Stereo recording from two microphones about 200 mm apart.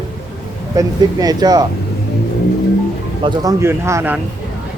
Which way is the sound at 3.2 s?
20° right (ahead or behind).